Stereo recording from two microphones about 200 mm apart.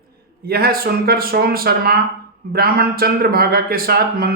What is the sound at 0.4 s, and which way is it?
A man's voice, 50° right (ahead or behind).